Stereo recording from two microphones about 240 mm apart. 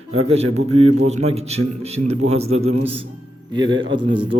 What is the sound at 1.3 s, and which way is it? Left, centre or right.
A man's voice, right.